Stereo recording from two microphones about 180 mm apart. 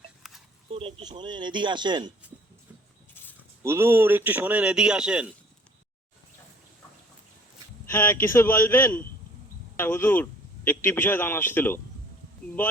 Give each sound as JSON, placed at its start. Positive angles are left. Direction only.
{"t": 0.2, "sound": "a sound", "side_deg": 0}
{"t": 0.7, "sound": "speech", "side_deg": -30}
{"t": 3.6, "sound": "a man's voice", "side_deg": -15}
{"t": 7.9, "sound": "a man's voice", "side_deg": 15}